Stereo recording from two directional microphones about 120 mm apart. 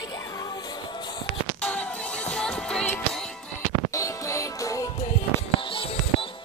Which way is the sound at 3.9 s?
25° left (ahead or behind).